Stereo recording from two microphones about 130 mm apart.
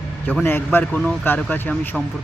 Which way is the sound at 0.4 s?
15° left (ahead or behind).